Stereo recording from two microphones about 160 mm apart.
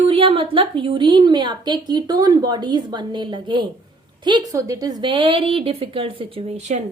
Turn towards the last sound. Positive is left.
turn(degrees=-45)  # may be behind; listen again after turning